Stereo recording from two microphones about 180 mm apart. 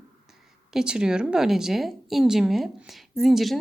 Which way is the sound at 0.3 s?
Centre (ahead or behind).